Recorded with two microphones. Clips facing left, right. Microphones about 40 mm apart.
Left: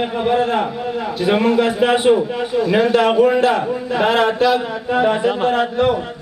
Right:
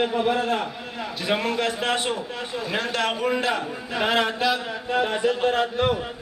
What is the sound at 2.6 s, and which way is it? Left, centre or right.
A man's voice, centre.